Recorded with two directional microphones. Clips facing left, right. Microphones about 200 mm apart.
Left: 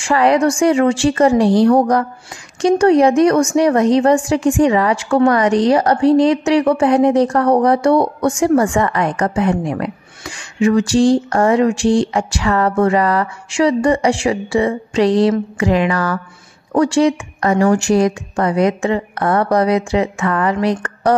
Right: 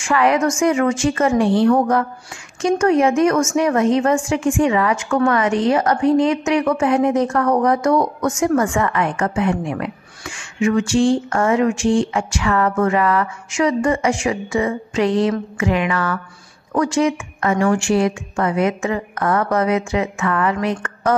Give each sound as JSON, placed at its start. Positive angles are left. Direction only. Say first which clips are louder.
{"t": 0.0, "sound": "a woman's voice", "louder": "left 3 dB", "side_deg": 35}